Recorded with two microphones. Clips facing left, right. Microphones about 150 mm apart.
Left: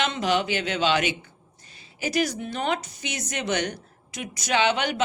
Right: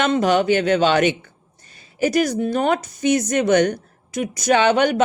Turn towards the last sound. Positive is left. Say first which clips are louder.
# right 7 dB
turn(degrees=-50)  # may be behind; listen again after turning